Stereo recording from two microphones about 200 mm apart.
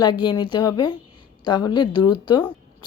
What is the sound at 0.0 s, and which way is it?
Speech, 20° left (ahead or behind).